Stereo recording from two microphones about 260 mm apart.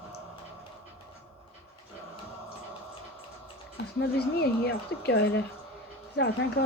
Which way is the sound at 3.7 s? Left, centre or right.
Left.